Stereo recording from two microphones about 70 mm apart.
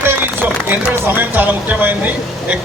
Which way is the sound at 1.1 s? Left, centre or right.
Right.